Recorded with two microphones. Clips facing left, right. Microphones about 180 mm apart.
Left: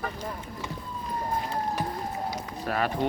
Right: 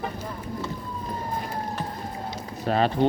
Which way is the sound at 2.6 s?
25° right (ahead or behind).